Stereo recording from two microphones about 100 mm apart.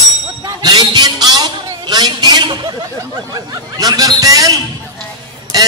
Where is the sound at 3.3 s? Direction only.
40° right (ahead or behind).